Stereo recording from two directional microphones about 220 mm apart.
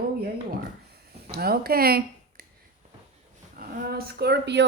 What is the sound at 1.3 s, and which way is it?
Speech, 45° right (ahead or behind).